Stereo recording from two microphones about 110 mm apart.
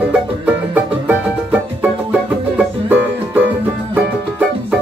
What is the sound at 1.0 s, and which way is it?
Music, 15° right (ahead or behind).